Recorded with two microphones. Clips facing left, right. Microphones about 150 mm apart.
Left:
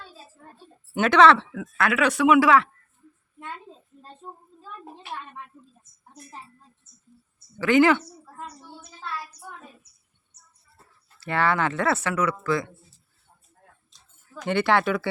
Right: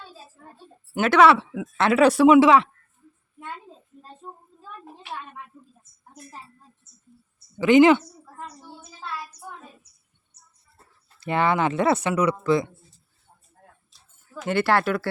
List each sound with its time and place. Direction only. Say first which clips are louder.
0.9 s speech: even; 5° right (ahead or behind)
1.8 s speech: right 5 dB; 35° right (ahead or behind)
4.2 s a sound: even; centre (ahead or behind)
7.6 s speech: right 4 dB; 20° right (ahead or behind)
11.2 s speech: right 2 dB; 20° right (ahead or behind)
13.9 s speech: right 3 dB; 5° right (ahead or behind)